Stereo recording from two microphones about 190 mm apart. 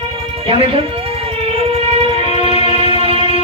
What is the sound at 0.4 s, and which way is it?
Music, 30° right (ahead or behind).